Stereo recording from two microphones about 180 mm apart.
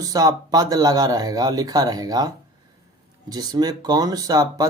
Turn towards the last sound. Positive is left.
turn(degrees=-20)  # may be behind; listen again after turning